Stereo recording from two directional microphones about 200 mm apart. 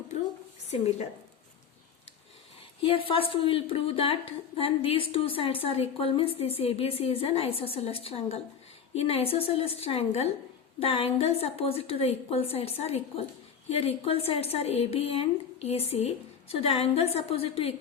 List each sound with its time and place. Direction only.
0.7 s a woman's voice: 35° left (ahead or behind)
2.8 s a woman's voice: 25° left (ahead or behind)